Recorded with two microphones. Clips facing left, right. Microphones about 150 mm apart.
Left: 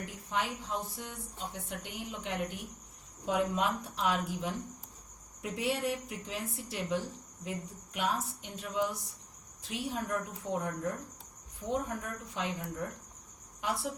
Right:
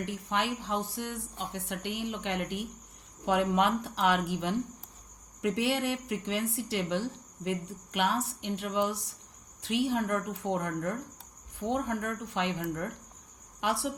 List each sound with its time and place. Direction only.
0.0 s a woman's voice: 80° right